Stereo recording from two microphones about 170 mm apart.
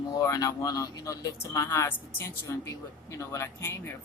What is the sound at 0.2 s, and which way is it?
Speech, 20° left (ahead or behind).